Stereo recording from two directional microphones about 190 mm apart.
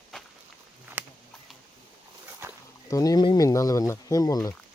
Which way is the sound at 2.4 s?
15° right (ahead or behind).